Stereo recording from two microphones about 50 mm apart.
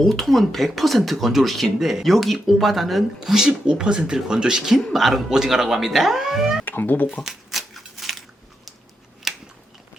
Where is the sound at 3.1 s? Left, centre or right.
Centre.